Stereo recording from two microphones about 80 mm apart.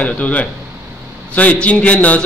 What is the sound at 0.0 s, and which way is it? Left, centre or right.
A man's voice, centre.